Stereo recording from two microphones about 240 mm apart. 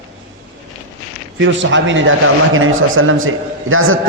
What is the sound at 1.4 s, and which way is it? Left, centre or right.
A man's voice, right.